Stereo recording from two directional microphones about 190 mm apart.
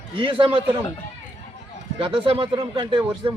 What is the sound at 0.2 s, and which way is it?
Speech, 25° right (ahead or behind).